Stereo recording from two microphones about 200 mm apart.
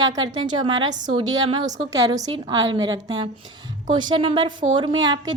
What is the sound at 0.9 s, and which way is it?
Speech, 40° right (ahead or behind).